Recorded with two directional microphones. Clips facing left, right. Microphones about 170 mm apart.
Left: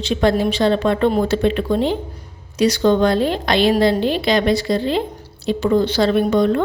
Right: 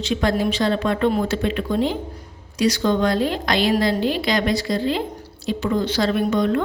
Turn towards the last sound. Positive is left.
turn(degrees=30)  # may be behind; listen again after turning